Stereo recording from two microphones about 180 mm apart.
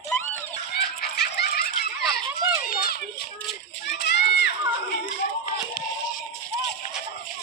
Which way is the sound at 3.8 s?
70° left (ahead or behind).